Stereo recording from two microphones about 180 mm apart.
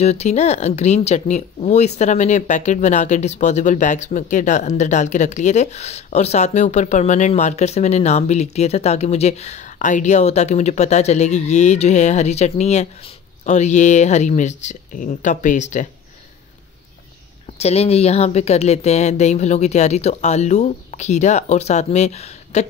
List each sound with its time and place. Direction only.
0.0 s speech: 35° left (ahead or behind)
17.6 s speech: 35° left (ahead or behind)